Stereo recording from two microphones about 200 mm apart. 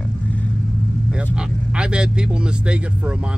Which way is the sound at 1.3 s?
5° right (ahead or behind).